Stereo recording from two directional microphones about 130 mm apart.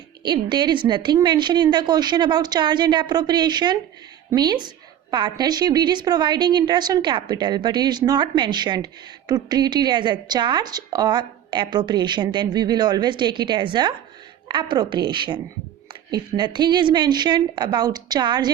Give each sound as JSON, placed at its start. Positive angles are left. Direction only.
{"t": 0.2, "sound": "a woman's voice", "side_deg": -35}